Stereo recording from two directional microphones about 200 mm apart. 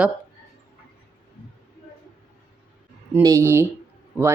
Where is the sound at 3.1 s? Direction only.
15° right (ahead or behind).